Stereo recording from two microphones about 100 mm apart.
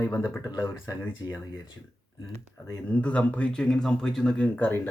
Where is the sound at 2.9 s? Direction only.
15° left (ahead or behind).